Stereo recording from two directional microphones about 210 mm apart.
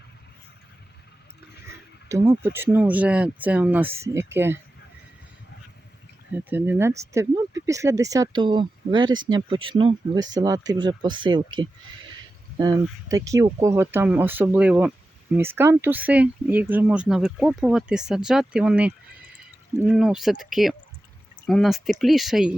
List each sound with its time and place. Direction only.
2.0 s speech: 15° right (ahead or behind)
6.3 s speech: 10° right (ahead or behind)